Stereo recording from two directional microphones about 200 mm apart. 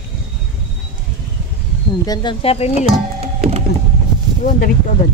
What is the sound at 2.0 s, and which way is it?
Speech, 20° left (ahead or behind).